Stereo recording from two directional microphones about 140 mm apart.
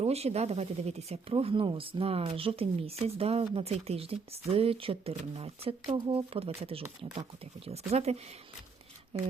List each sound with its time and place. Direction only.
0.0 s speech: 50° right (ahead or behind)